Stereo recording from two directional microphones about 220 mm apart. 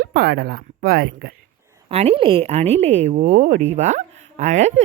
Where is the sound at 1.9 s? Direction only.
30° right (ahead or behind).